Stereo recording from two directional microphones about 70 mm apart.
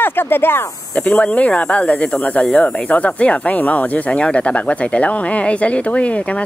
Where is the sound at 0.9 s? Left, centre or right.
Centre.